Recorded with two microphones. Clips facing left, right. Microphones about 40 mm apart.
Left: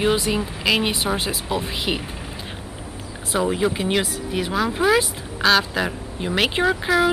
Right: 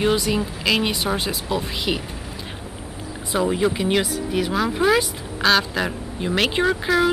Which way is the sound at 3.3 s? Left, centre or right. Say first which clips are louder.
Right 1 dB; centre.